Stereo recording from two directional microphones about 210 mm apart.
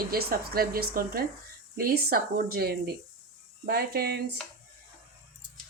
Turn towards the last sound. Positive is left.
turn(degrees=-50)  # may be behind; listen again after turning